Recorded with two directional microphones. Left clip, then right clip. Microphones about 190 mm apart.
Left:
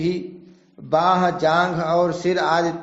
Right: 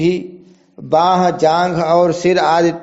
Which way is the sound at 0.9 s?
35° right (ahead or behind).